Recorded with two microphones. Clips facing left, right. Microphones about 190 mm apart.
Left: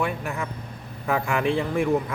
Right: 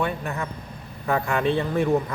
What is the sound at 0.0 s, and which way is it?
Speech, 10° left (ahead or behind).